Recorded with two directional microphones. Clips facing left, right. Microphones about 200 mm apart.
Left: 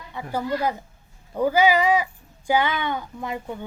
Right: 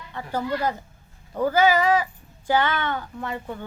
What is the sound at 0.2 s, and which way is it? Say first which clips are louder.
A woman's voice: left 1 dB; 10° left (ahead or behind).